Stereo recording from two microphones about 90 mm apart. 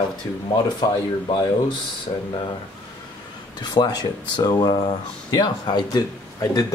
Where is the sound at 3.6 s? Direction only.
55° left (ahead or behind).